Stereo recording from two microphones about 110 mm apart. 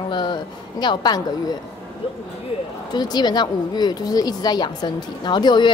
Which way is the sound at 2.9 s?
40° left (ahead or behind).